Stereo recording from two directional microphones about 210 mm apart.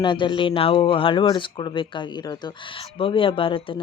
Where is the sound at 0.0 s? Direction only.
20° left (ahead or behind).